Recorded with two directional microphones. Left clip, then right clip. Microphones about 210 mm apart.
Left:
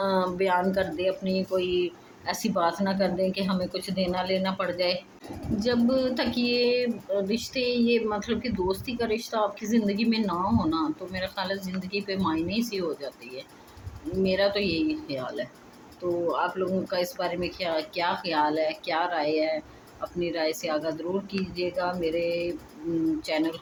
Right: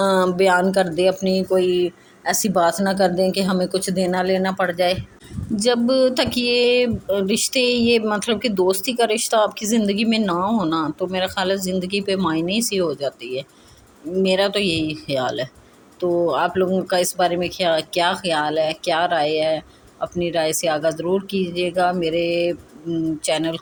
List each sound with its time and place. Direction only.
0.0 s speech: 40° right (ahead or behind)
5.5 s speech: 45° right (ahead or behind)